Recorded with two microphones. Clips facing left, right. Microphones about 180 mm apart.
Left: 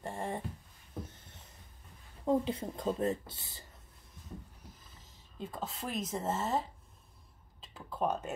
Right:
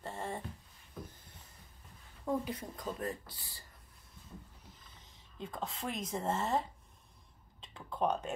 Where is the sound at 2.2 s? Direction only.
25° left (ahead or behind).